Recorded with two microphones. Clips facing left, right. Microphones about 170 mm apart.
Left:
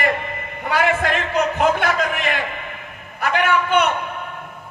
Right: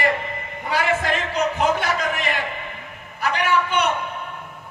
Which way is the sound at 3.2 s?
55° left (ahead or behind).